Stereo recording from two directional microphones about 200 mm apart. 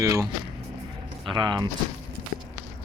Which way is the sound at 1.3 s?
20° right (ahead or behind).